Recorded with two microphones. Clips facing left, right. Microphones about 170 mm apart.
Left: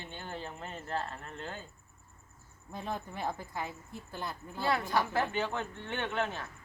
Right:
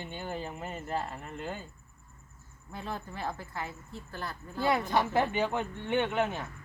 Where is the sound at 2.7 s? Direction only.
15° left (ahead or behind).